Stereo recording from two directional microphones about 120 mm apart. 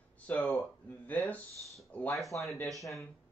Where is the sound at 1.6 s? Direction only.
Centre (ahead or behind).